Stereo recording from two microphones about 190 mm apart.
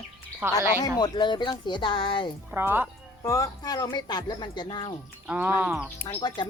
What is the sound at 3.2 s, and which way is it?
Speech, 15° left (ahead or behind).